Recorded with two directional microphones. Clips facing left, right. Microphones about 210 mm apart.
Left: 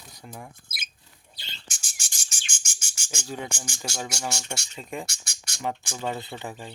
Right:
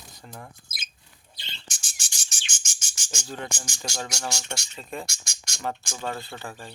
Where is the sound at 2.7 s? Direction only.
10° left (ahead or behind).